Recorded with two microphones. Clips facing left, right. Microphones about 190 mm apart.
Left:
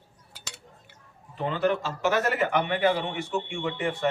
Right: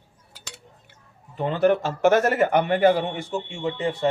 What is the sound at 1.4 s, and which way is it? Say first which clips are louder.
Speech: right 5 dB; 45° right (ahead or behind).